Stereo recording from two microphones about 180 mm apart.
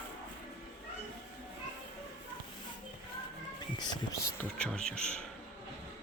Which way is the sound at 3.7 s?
25° left (ahead or behind).